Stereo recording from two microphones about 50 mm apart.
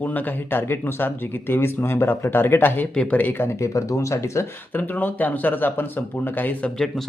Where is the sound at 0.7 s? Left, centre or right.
Left.